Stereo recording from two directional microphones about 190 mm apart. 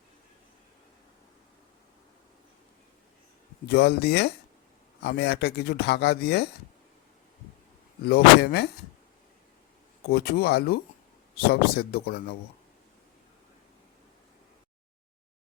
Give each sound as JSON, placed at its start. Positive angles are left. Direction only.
{"t": 3.7, "sound": "speech", "side_deg": 60}
{"t": 8.0, "sound": "speech", "side_deg": 55}
{"t": 10.1, "sound": "speech", "side_deg": 55}